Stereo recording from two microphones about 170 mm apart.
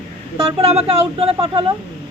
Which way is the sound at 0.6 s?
35° right (ahead or behind).